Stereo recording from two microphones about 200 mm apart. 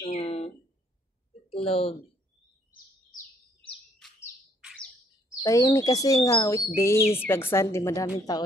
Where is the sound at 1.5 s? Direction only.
30° left (ahead or behind).